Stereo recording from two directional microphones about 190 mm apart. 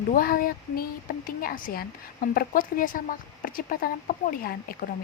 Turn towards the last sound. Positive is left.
turn(degrees=50)  # may be behind; listen again after turning